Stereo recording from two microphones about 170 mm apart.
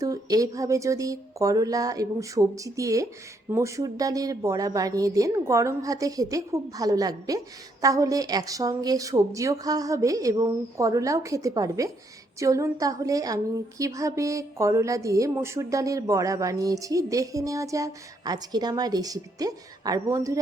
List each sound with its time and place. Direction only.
0.0 s a woman's voice: 20° right (ahead or behind)